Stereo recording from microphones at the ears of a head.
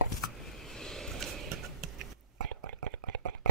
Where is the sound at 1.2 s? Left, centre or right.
Right.